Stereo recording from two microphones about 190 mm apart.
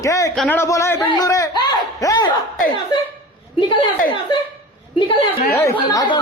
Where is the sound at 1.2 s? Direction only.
20° left (ahead or behind).